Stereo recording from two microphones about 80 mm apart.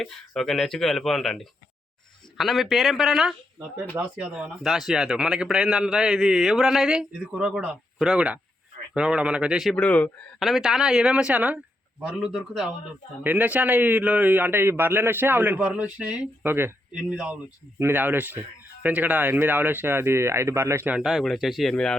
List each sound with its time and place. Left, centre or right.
0.0 s speech: centre
3.9 s speech: centre
9.7 s speech: centre
10.4 s speech: centre
12.0 s speech: centre
13.2 s speech: centre
15.5 s speech: centre
16.4 s speech: right
16.9 s speech: centre
17.7 s speech: right
20.9 s speech: centre